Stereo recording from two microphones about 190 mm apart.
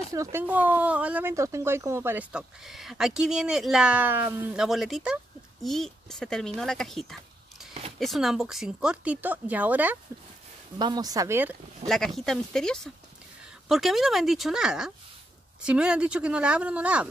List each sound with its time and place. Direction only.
0.1 s speech: 15° right (ahead or behind)
10.8 s speech: 20° right (ahead or behind)
11.9 s speech: centre (ahead or behind)